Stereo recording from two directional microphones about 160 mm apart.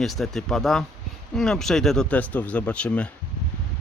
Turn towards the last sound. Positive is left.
turn(degrees=10)  # may be behind; listen again after turning